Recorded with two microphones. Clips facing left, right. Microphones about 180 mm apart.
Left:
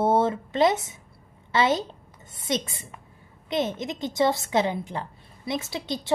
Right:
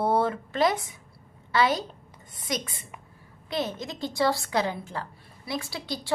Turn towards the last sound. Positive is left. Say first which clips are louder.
# left 3 dB
turn(degrees=20)  # may be behind; listen again after turning